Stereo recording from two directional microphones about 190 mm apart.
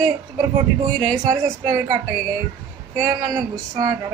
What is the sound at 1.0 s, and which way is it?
Speech, 20° right (ahead or behind).